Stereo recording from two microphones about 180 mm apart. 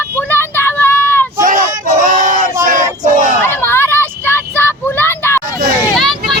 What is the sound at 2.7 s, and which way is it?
Choir, 45° right (ahead or behind).